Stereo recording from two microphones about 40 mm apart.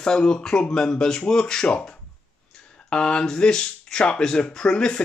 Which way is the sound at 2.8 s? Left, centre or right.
Left.